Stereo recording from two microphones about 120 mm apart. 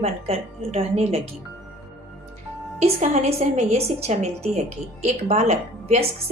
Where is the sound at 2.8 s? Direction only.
65° right (ahead or behind).